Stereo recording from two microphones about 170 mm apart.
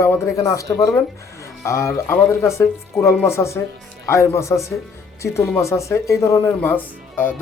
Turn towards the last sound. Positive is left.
turn(degrees=10)  # may be behind; listen again after turning